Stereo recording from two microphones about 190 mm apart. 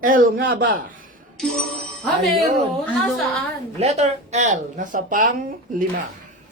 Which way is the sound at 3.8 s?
35° right (ahead or behind).